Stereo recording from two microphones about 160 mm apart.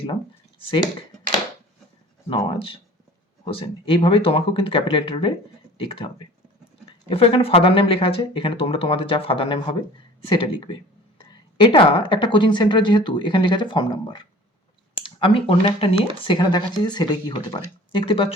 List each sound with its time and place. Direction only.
2.3 s a woman's voice: 35° left (ahead or behind)